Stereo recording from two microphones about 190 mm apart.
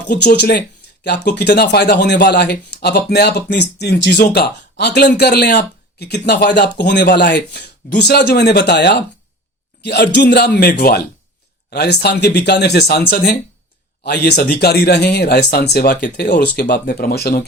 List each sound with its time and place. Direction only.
0.1 s speech: 55° left (ahead or behind)